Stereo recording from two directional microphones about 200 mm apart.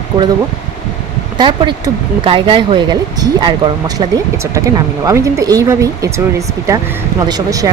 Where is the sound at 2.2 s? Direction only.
25° right (ahead or behind).